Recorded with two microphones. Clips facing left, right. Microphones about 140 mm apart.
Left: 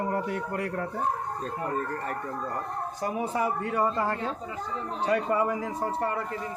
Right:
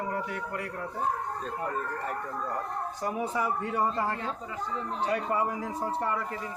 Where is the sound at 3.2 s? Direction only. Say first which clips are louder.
Left 2 dB; 60° left (ahead or behind).